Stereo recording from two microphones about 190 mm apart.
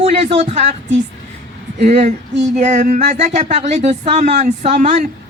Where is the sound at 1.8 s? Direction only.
35° right (ahead or behind).